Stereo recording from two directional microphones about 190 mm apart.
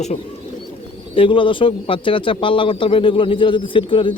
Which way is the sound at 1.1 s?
25° left (ahead or behind).